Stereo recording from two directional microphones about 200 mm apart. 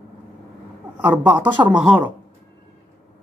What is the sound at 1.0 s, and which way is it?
Speech, 10° right (ahead or behind).